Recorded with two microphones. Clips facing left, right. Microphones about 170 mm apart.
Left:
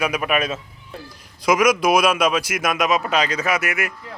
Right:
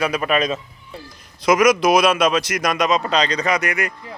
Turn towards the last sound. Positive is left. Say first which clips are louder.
# right 2 dB
turn(degrees=5)  # may be behind; listen again after turning